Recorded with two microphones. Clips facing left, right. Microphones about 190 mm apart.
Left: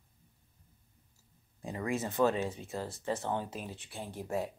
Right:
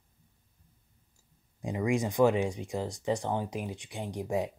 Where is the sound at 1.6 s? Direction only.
15° right (ahead or behind).